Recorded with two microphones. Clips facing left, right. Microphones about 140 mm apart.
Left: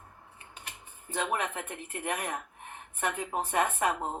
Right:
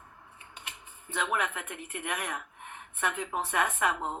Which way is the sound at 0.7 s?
40° left (ahead or behind).